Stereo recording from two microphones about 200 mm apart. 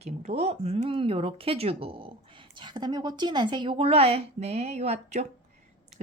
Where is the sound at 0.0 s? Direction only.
35° right (ahead or behind).